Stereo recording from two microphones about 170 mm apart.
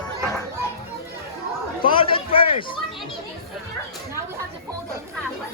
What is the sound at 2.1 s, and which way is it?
Speech, 30° left (ahead or behind).